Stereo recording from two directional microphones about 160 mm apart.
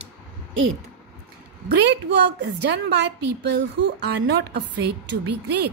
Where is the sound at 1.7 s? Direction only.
90° right.